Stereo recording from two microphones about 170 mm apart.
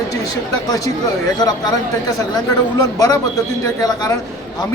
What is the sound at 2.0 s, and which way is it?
Speech, 20° left (ahead or behind).